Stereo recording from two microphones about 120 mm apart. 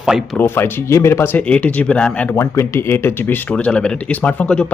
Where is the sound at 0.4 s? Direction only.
20° left (ahead or behind).